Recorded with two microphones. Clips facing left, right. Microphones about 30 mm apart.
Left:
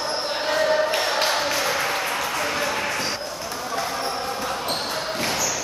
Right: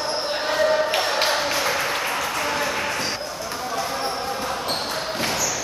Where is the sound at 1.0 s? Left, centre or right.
Centre.